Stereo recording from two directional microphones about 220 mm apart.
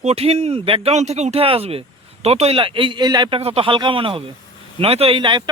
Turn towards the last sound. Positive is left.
turn(degrees=-20)  # may be behind; listen again after turning